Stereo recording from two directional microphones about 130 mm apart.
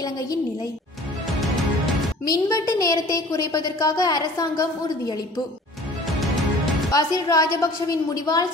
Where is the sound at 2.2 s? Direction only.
25° left (ahead or behind).